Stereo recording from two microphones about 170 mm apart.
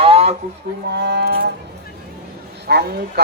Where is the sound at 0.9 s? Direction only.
80° right.